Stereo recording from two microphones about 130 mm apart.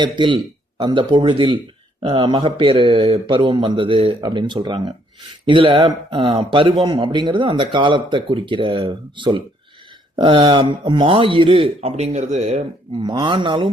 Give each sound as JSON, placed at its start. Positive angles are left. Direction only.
{"t": 0.0, "sound": "speech", "side_deg": -35}
{"t": 13.0, "sound": "speech", "side_deg": -35}